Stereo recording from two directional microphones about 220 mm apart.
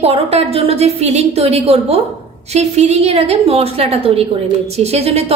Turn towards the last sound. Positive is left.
turn(degrees=-30)  # may be behind; listen again after turning